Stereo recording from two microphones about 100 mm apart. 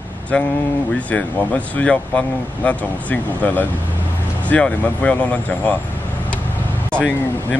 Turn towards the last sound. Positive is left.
turn(degrees=10)  # may be behind; listen again after turning